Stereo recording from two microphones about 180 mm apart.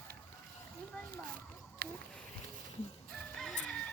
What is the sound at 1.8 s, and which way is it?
Speech, 55° right (ahead or behind).